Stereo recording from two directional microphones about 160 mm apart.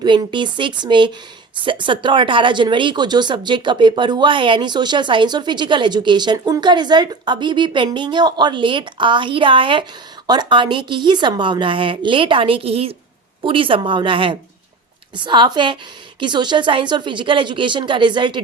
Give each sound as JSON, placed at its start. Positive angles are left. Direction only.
{"t": 0.0, "sound": "a woman's voice", "side_deg": -30}